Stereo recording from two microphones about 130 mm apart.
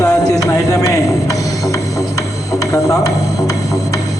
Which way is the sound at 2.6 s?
25° left (ahead or behind).